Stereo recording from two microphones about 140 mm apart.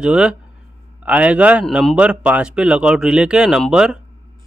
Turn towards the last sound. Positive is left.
turn(degrees=-5)  # may be behind; listen again after turning